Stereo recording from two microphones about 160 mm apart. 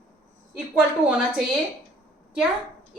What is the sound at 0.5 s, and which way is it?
Speech, 10° right (ahead or behind).